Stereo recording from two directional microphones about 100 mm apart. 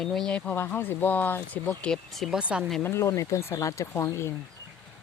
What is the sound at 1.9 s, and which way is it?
Speech, centre (ahead or behind).